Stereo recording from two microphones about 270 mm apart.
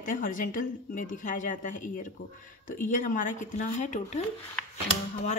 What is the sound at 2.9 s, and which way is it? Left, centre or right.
Speech, left.